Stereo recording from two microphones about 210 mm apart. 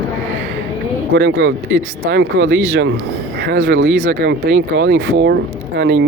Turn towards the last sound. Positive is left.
turn(degrees=-60)  # may be behind; listen again after turning